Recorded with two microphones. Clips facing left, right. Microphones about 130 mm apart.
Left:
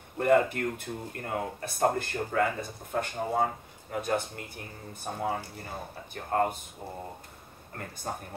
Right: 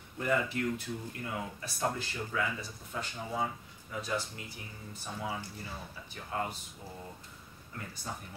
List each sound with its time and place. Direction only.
0.2 s speech: 55° left (ahead or behind)
7.7 s speech: 55° left (ahead or behind)